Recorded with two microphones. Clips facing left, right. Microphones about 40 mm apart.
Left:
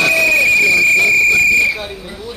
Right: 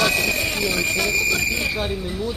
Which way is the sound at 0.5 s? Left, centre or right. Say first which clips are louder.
Left 11 dB; left.